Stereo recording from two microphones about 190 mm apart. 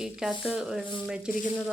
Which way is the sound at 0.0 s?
Centre (ahead or behind).